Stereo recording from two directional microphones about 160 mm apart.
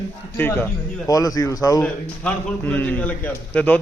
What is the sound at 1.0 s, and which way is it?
Speech, 25° left (ahead or behind).